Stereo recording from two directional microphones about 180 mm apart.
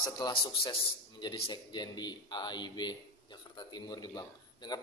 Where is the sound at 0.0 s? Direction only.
25° left (ahead or behind).